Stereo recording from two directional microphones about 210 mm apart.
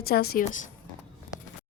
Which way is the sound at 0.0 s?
45° left (ahead or behind).